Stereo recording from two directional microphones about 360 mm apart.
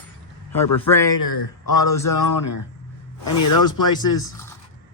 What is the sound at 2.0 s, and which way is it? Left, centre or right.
Speech, left.